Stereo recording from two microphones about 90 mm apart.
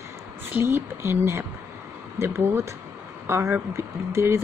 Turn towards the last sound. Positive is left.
turn(degrees=-30)  # may be behind; listen again after turning